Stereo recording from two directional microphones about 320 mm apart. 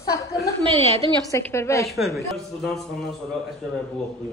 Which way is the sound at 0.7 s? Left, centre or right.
Centre.